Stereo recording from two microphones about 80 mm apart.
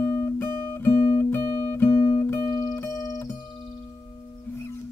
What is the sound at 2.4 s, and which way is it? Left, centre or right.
Music, left.